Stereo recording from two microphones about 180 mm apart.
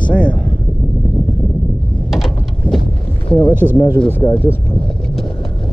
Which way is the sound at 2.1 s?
Centre (ahead or behind).